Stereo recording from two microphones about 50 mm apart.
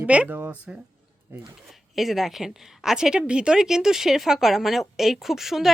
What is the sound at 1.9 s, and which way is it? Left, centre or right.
A woman's voice, centre.